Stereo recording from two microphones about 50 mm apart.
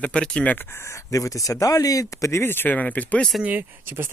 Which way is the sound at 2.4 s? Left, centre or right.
Left.